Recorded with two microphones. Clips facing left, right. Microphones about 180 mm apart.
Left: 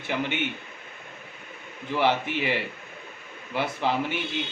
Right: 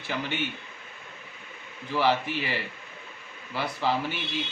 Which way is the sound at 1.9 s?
20° left (ahead or behind).